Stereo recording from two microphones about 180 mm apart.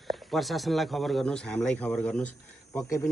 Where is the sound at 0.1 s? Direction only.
Centre (ahead or behind).